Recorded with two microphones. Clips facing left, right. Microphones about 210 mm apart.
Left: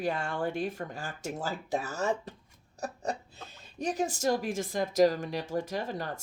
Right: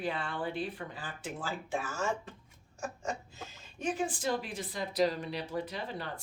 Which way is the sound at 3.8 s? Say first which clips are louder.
Left 4 dB; 40° left (ahead or behind).